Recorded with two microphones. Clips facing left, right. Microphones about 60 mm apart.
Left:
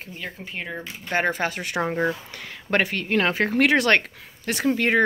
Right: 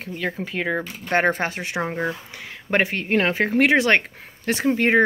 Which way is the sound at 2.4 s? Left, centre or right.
Right.